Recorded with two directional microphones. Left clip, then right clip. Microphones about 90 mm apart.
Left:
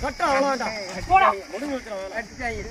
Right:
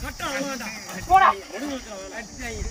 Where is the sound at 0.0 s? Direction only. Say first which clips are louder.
Left 8 dB; 5° left (ahead or behind).